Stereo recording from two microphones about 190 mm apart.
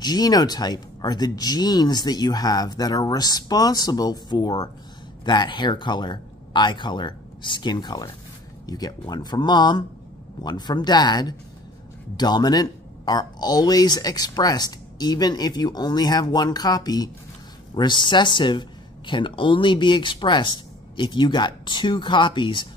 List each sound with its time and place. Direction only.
0.0 s speech: 20° left (ahead or behind)